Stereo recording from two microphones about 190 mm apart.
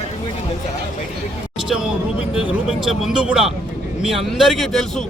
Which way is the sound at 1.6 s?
Centre (ahead or behind).